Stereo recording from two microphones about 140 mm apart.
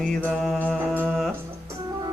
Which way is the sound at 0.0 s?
5° left (ahead or behind).